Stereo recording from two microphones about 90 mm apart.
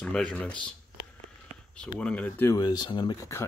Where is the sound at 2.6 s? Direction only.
50° left (ahead or behind).